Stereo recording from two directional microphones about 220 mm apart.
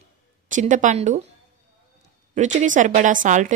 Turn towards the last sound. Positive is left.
turn(degrees=-35)  # may be behind; listen again after turning